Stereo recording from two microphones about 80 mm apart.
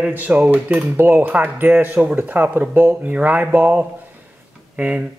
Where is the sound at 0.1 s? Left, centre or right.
Right.